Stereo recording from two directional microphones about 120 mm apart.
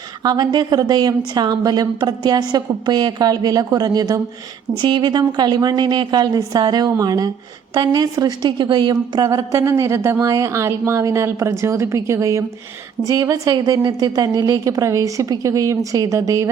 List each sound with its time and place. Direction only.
0.3 s a woman's voice: 35° right (ahead or behind)